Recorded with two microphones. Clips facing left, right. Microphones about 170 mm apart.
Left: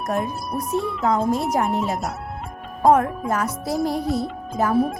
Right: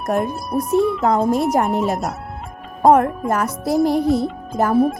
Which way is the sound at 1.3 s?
60° right (ahead or behind).